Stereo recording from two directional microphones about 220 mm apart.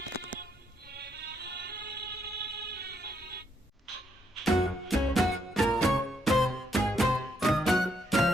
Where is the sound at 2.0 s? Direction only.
45° right (ahead or behind).